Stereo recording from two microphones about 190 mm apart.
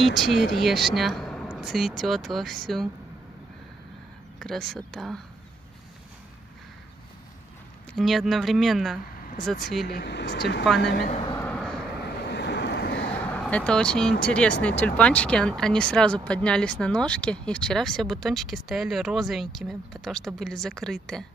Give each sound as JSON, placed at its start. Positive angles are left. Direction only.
{"t": 0.0, "sound": "speech", "side_deg": 0}
{"t": 4.4, "sound": "speech", "side_deg": 0}
{"t": 7.9, "sound": "speech", "side_deg": 0}
{"t": 9.8, "sound": "speech", "side_deg": 60}
{"t": 11.1, "sound": "a man's voice", "side_deg": 25}
{"t": 11.3, "sound": "vehicle", "side_deg": 5}
{"t": 12.3, "sound": "vehicle", "side_deg": 65}
{"t": 13.2, "sound": "speech", "side_deg": 5}